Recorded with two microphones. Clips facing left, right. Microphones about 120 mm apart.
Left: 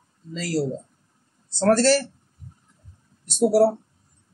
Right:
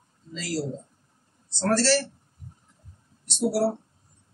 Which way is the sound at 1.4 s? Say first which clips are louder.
Left 5 dB; 45° left (ahead or behind).